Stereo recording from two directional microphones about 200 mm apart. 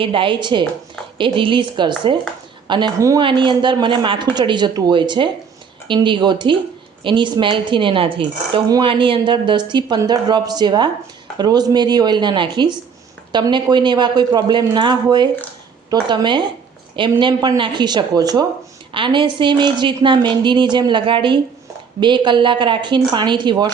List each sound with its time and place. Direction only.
0.0 s speech: 25° right (ahead or behind)